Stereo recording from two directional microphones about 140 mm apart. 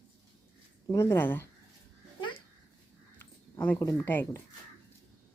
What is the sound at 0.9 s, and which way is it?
Speech, 15° left (ahead or behind).